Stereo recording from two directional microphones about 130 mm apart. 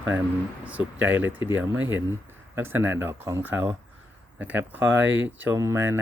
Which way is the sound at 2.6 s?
15° right (ahead or behind).